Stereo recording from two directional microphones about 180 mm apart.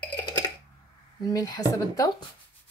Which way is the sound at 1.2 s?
20° left (ahead or behind).